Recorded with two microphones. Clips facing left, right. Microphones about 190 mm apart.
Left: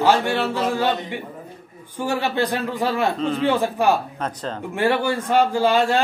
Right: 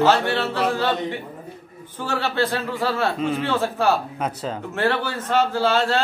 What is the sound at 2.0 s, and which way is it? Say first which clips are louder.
A man's voice: left 1 dB; 15° left (ahead or behind).